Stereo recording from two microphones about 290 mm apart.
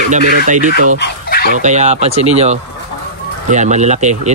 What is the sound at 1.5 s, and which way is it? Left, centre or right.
Speech, right.